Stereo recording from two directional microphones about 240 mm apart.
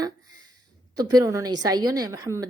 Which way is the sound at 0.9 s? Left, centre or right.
Centre.